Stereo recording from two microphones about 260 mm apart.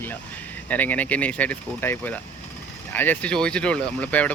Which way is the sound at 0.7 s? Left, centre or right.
Centre.